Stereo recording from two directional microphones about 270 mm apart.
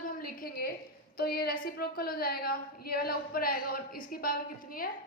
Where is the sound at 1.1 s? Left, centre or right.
Left.